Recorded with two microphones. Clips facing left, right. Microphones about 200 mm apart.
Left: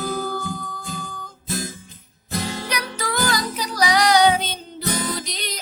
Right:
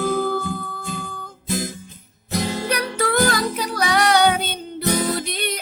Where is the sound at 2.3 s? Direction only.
15° right (ahead or behind).